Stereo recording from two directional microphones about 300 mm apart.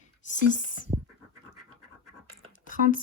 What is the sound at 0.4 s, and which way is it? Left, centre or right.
Speech, left.